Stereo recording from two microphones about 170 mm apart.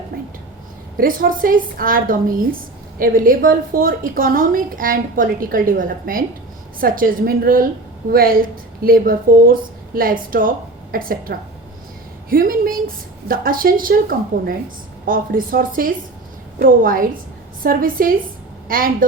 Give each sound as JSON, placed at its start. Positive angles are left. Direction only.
{"t": 0.9, "sound": "a woman's voice", "side_deg": -55}